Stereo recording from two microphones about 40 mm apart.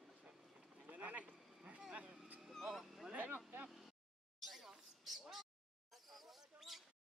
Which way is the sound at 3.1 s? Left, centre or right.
Right.